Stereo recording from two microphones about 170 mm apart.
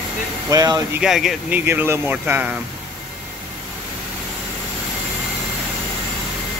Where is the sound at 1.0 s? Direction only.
Centre (ahead or behind).